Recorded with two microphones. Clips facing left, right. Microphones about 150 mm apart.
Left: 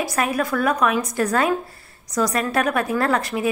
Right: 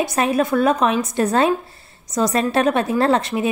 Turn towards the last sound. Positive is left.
turn(degrees=-25)  # may be behind; listen again after turning